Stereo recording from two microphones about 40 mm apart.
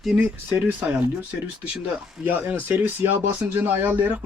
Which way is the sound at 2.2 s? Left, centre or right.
Right.